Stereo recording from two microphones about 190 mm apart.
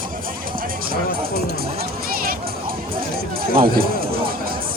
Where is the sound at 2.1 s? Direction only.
50° right (ahead or behind).